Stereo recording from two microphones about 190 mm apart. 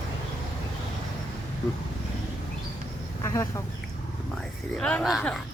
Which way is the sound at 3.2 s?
15° left (ahead or behind).